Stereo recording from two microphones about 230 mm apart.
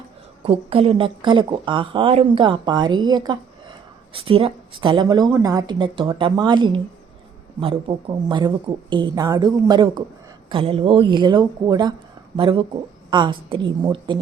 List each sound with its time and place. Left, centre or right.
0.4 s a woman's voice: right